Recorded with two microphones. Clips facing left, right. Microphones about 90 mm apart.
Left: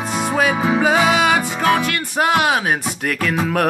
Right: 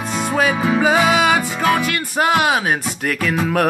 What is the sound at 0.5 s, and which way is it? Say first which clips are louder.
Music: even; 20° left (ahead or behind).